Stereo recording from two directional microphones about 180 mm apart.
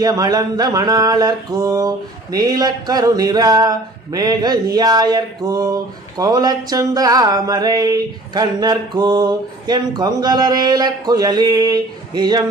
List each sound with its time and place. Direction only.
0.0 s mantra: 20° right (ahead or behind)